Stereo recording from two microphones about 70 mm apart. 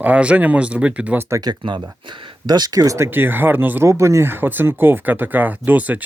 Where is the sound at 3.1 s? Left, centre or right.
Right.